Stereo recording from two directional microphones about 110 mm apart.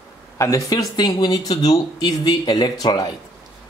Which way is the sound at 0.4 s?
30° left (ahead or behind).